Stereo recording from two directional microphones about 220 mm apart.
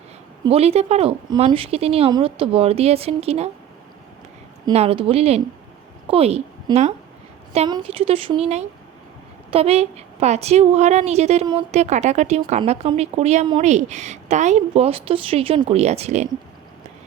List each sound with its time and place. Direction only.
0.4 s a woman's voice: 25° right (ahead or behind)
4.7 s a woman's voice: 25° right (ahead or behind)